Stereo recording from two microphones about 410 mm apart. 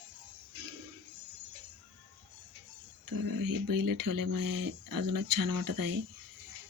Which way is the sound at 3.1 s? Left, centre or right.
Right.